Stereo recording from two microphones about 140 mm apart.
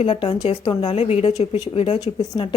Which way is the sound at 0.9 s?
50° left (ahead or behind).